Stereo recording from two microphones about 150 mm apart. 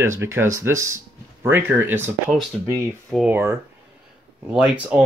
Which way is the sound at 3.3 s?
15° right (ahead or behind).